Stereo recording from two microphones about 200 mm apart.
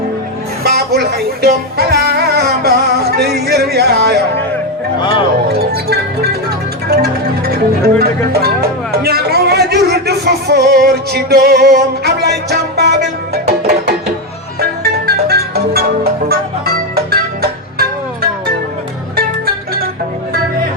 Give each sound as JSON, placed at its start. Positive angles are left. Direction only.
{"t": 0.6, "sound": "music", "side_deg": -50}
{"t": 5.5, "sound": "music", "side_deg": -50}
{"t": 15.0, "sound": "music", "side_deg": -50}